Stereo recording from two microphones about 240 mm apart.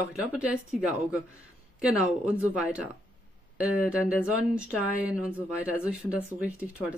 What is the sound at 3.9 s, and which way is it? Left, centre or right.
Speech, centre.